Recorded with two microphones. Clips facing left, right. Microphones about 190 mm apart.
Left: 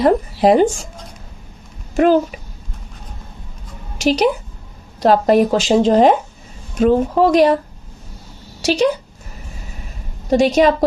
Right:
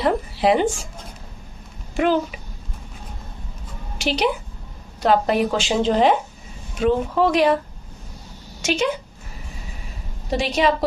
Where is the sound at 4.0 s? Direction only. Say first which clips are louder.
Left 6 dB; 45° left (ahead or behind).